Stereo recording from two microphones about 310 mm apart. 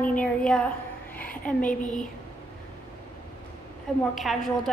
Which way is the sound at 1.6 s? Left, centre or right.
Left.